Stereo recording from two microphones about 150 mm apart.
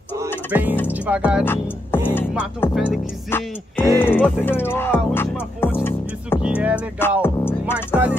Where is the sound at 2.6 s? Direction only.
15° left (ahead or behind).